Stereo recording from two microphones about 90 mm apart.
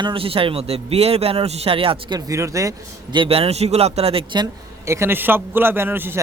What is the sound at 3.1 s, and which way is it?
A man's voice, 75° right (ahead or behind).